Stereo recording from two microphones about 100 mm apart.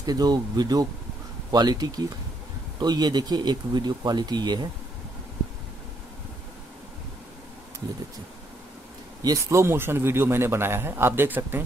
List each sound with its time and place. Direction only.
0.0 s speech: 40° right (ahead or behind)
9.2 s speech: 40° right (ahead or behind)
9.6 s a man's voice: 25° right (ahead or behind)